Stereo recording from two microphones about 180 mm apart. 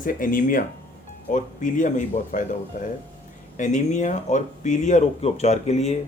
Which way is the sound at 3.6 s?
40° left (ahead or behind).